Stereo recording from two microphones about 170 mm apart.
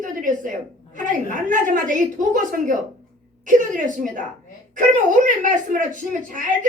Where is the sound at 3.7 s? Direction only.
50° right (ahead or behind).